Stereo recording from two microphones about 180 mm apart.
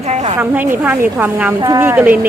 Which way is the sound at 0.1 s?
40° right (ahead or behind).